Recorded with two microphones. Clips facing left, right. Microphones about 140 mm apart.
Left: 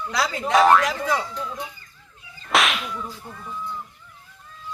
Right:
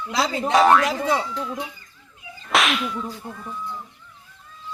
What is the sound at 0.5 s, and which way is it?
Speech, centre (ahead or behind).